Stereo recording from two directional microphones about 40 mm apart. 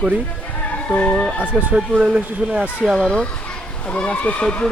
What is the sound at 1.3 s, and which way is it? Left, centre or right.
Speech, right.